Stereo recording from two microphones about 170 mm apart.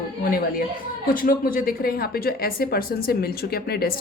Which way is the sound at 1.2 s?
60° left (ahead or behind).